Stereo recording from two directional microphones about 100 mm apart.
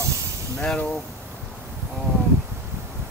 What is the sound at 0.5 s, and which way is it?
Speech, 10° left (ahead or behind).